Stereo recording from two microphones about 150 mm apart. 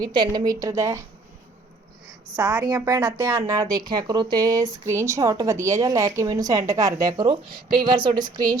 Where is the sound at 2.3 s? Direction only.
15° right (ahead or behind).